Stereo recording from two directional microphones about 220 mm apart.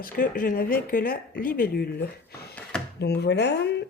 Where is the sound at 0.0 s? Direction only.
40° left (ahead or behind).